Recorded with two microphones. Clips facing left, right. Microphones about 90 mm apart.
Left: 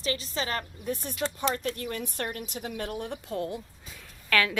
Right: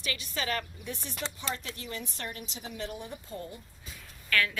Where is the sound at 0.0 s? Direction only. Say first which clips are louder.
Left 4 dB; 35° left (ahead or behind).